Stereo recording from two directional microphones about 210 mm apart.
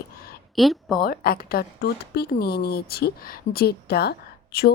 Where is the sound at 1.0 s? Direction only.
45° left (ahead or behind).